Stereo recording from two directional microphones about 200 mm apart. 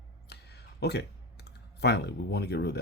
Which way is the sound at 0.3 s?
55° left (ahead or behind).